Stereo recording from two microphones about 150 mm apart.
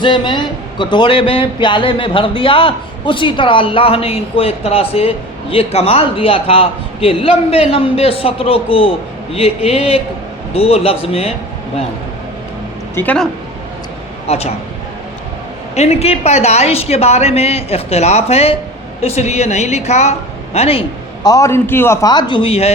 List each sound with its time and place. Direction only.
0.0 s speech: 30° left (ahead or behind)
13.0 s a man's voice: 10° left (ahead or behind)
14.3 s a woman's voice: 45° left (ahead or behind)
15.7 s a woman's voice: 45° left (ahead or behind)
21.2 s a man's voice: 20° left (ahead or behind)
22.0 s speech: 30° left (ahead or behind)